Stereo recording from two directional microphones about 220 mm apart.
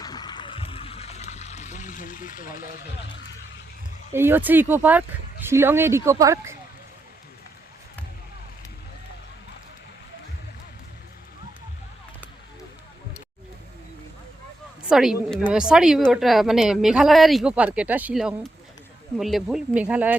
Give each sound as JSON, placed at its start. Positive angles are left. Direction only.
{"t": 0.0, "sound": "water", "side_deg": 20}
{"t": 4.1, "sound": "speech", "side_deg": -10}
{"t": 14.8, "sound": "a woman's voice", "side_deg": 0}